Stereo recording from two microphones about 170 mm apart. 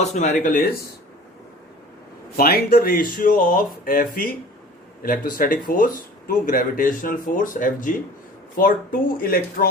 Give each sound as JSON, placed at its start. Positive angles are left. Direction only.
{"t": 0.0, "sound": "speech", "side_deg": 45}
{"t": 2.3, "sound": "speech", "side_deg": 65}